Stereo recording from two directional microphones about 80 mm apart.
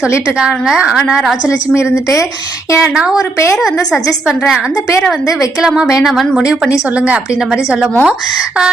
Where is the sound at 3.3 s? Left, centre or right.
Left.